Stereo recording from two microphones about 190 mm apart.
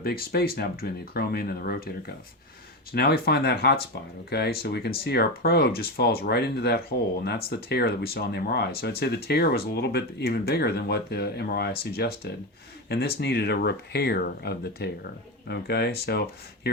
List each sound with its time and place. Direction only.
0.0 s speech: 55° left (ahead or behind)
2.9 s speech: 55° left (ahead or behind)